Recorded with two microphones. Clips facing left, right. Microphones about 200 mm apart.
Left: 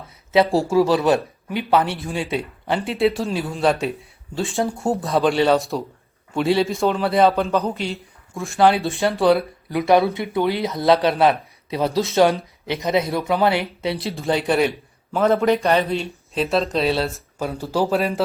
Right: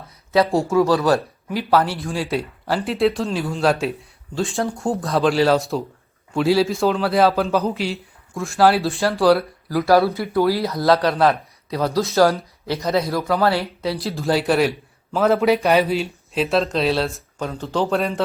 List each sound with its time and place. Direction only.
0.7 s speech: 30° left (ahead or behind)
1.5 s a man's voice: centre (ahead or behind)
11.7 s speech: 25° left (ahead or behind)
14.0 s a man's voice: centre (ahead or behind)